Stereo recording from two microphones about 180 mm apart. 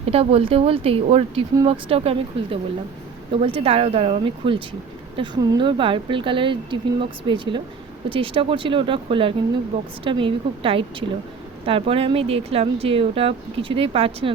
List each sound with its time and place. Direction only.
0.1 s a woman's voice: 35° right (ahead or behind)